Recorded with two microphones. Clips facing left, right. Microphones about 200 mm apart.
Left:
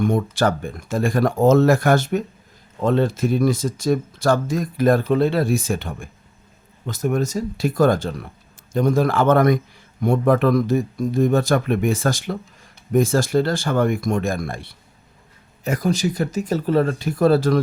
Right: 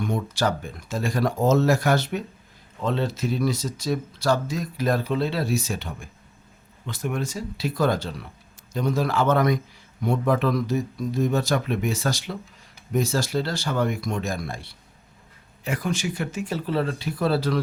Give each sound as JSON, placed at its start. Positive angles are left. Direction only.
{"t": 0.0, "sound": "speech", "side_deg": 50}
{"t": 6.8, "sound": "speech", "side_deg": 40}
{"t": 15.6, "sound": "speech", "side_deg": 40}